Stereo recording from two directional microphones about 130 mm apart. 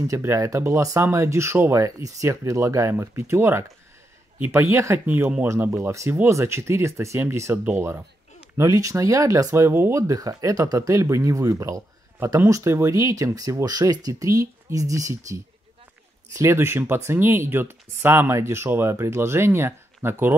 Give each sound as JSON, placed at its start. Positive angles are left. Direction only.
{"t": 0.0, "sound": "speech", "side_deg": -25}